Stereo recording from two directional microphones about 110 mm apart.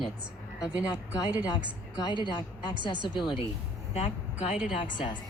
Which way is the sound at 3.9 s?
85° left.